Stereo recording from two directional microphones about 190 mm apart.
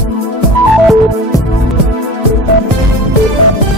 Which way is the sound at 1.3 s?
20° left (ahead or behind).